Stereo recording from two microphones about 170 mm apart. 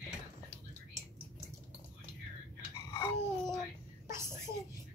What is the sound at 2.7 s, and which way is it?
Babbling, 25° left (ahead or behind).